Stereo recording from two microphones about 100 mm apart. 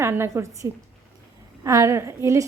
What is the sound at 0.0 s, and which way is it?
A woman's voice, 25° right (ahead or behind).